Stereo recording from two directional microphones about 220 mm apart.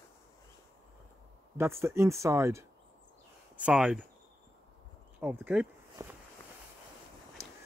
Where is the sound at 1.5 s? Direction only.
10° right (ahead or behind).